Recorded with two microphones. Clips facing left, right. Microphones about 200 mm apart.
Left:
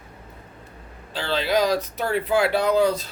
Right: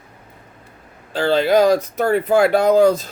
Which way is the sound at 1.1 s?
50° right (ahead or behind).